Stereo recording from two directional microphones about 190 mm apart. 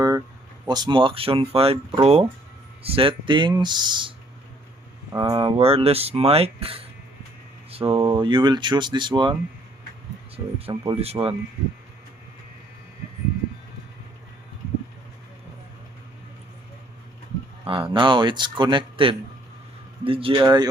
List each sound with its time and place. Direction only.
0.7 s speech: 20° right (ahead or behind)
5.1 s speech: 20° right (ahead or behind)
10.3 s speech: 30° right (ahead or behind)
17.7 s speech: 25° right (ahead or behind)